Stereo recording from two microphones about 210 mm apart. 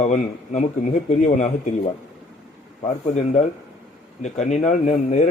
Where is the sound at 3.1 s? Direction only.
35° left (ahead or behind).